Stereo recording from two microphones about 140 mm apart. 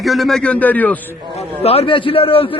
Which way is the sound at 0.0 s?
Centre (ahead or behind).